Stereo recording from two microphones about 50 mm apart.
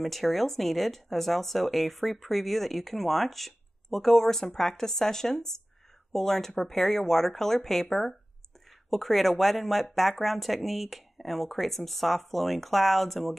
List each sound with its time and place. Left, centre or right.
0.0 s a woman's voice: centre